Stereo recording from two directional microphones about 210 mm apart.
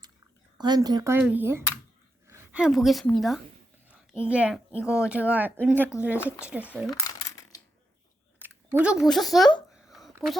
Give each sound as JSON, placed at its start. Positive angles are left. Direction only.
{"t": 0.6, "sound": "a woman's voice", "side_deg": -20}
{"t": 8.4, "sound": "speech", "side_deg": -5}
{"t": 9.7, "sound": "a sound", "side_deg": 0}